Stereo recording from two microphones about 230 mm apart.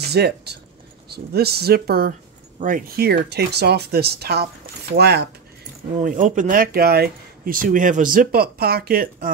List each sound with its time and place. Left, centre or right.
0.0 s speech: right
5.9 s speech: right